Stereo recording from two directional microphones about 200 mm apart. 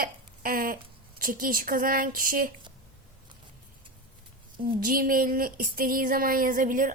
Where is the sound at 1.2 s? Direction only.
45° right (ahead or behind).